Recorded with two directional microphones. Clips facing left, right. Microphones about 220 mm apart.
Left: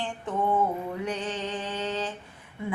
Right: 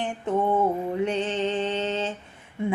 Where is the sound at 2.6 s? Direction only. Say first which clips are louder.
Right 6 dB; 25° right (ahead or behind).